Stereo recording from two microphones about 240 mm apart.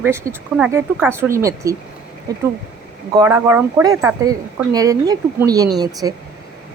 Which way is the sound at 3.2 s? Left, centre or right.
Centre.